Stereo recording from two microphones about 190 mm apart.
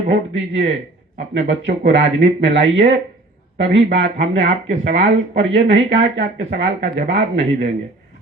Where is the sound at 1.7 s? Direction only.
70° right (ahead or behind).